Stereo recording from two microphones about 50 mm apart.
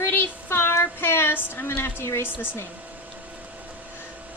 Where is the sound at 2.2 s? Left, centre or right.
Left.